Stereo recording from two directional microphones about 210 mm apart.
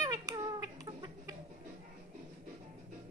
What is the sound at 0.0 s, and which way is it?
Cat, 15° right (ahead or behind).